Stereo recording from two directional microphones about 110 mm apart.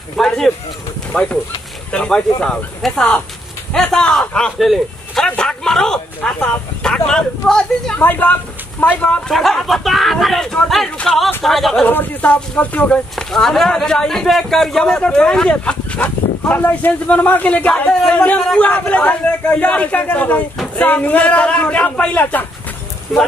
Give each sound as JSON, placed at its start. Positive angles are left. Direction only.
{"t": 0.2, "sound": "speech", "side_deg": 5}
{"t": 8.0, "sound": "speech", "side_deg": 15}
{"t": 9.3, "sound": "speech", "side_deg": 0}
{"t": 11.8, "sound": "speech", "side_deg": 15}
{"t": 13.3, "sound": "speech", "side_deg": 5}